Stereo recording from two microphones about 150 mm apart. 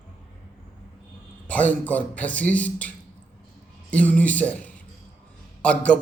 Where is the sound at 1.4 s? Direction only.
10° left (ahead or behind).